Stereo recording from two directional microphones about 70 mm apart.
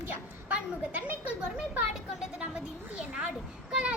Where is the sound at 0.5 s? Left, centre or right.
Centre.